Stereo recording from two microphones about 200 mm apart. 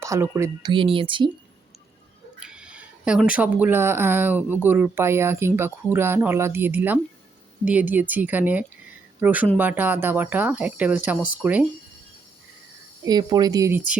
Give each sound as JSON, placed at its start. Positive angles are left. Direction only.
{"t": 0.0, "sound": "speech", "side_deg": -15}
{"t": 0.7, "sound": "speech", "side_deg": -25}
{"t": 2.4, "sound": "speech", "side_deg": -5}
{"t": 13.1, "sound": "speech", "side_deg": -20}